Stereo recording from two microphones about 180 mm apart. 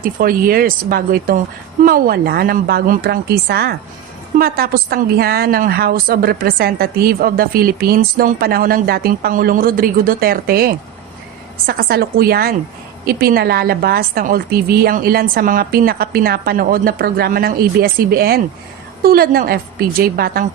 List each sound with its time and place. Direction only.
0.0 s a woman's voice: 50° right (ahead or behind)